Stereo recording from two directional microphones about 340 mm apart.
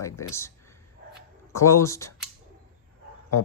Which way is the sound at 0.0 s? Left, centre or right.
Centre.